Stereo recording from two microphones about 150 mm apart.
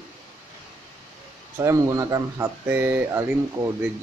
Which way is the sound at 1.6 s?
20° right (ahead or behind).